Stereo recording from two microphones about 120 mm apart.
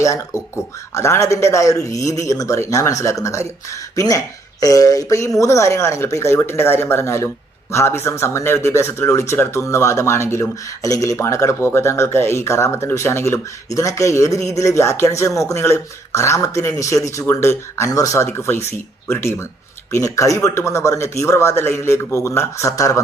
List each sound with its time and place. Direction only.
0.0 s speech: 25° left (ahead or behind)
19.9 s speech: 25° left (ahead or behind)